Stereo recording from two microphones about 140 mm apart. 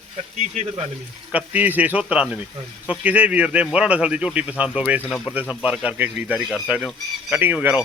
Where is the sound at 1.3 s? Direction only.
10° right (ahead or behind).